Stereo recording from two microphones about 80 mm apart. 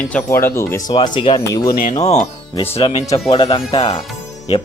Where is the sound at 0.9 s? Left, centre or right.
Left.